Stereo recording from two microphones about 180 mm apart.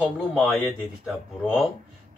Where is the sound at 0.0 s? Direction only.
Centre (ahead or behind).